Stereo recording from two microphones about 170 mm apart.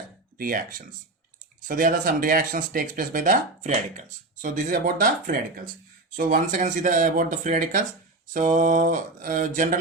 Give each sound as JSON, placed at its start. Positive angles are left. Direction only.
{"t": 0.3, "sound": "speech", "side_deg": -55}